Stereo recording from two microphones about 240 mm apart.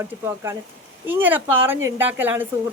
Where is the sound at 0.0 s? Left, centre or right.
Centre.